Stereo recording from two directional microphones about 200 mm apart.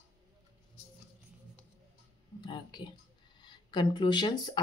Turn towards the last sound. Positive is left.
turn(degrees=20)  # may be behind; listen again after turning